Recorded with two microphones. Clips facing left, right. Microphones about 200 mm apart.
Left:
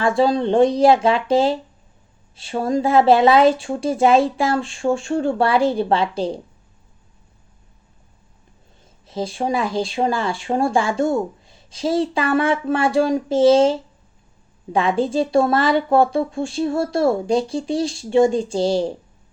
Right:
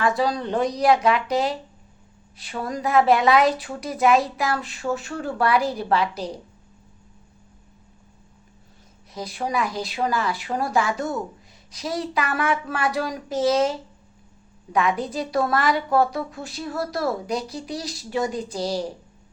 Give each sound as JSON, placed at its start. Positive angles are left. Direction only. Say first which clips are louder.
{"t": 0.0, "sound": "speech", "louder": "left 5 dB", "side_deg": 25}
{"t": 9.0, "sound": "speech", "louder": "left 6 dB", "side_deg": 30}